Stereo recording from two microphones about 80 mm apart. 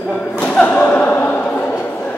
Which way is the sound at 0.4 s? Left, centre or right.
Centre.